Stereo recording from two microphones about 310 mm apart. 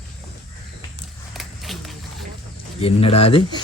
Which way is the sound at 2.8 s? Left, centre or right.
Centre.